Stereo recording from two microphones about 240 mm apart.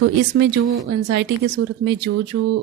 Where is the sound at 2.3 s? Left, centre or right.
Right.